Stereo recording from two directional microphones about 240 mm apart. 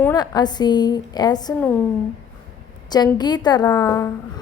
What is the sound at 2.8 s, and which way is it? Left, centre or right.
A woman's voice, centre.